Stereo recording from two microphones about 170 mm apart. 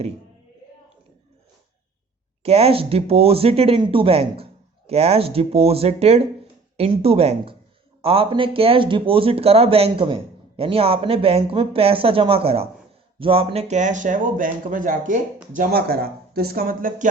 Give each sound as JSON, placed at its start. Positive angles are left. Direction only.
{"t": 2.4, "sound": "speech", "side_deg": -35}
{"t": 15.5, "sound": "speech", "side_deg": -65}